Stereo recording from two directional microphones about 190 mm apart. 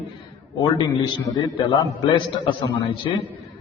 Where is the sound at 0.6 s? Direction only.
25° left (ahead or behind).